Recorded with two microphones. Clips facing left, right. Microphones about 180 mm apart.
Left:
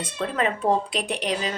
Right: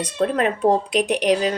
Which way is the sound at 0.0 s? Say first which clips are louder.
Right 6 dB; 40° right (ahead or behind).